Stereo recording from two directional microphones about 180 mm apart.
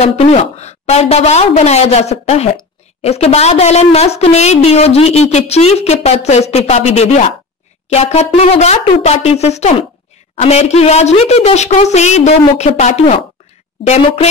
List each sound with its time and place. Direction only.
0.0 s a woman's voice: 35° left (ahead or behind)